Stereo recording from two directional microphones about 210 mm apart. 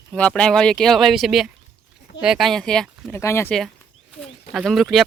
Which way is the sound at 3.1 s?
15° left (ahead or behind).